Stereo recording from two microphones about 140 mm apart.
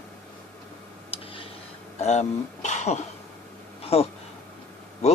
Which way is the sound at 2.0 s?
55° left (ahead or behind).